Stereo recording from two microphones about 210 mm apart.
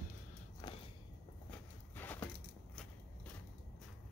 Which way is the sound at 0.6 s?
20° left (ahead or behind).